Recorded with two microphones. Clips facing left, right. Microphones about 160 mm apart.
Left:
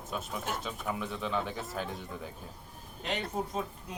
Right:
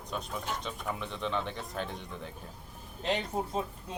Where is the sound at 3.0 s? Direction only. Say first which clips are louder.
Right 2 dB; 30° right (ahead or behind).